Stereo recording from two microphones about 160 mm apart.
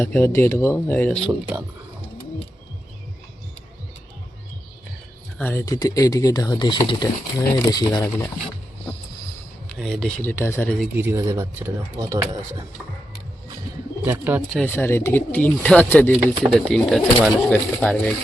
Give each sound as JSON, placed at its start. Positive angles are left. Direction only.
{"t": 0.0, "sound": "speech", "side_deg": 15}
{"t": 5.4, "sound": "speech", "side_deg": 15}
{"t": 9.6, "sound": "speech", "side_deg": 0}
{"t": 10.2, "sound": "speech", "side_deg": 15}
{"t": 10.9, "sound": "speech", "side_deg": -15}
{"t": 14.0, "sound": "speech", "side_deg": -10}
{"t": 14.5, "sound": "speech", "side_deg": 10}